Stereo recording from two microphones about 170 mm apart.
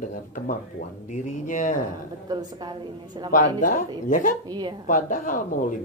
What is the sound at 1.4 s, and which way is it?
Speech, 50° left (ahead or behind).